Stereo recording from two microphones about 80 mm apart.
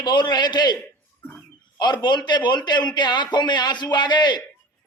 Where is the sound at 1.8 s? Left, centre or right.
Left.